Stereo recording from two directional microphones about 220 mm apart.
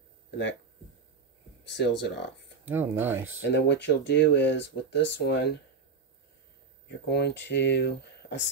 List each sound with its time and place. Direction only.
1.6 s speech: 50° left (ahead or behind)
2.7 s speech: 10° right (ahead or behind)
3.4 s speech: 50° left (ahead or behind)
7.1 s speech: 50° left (ahead or behind)